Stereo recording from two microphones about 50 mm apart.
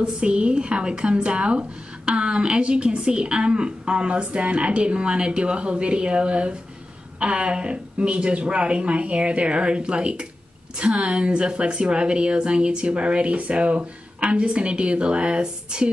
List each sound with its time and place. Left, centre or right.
0.0 s a woman's voice: right